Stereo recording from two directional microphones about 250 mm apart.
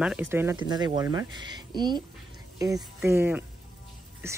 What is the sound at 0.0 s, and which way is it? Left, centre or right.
Speech, centre.